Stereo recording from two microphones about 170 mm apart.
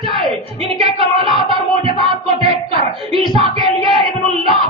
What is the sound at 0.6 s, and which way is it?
Music, 35° right (ahead or behind).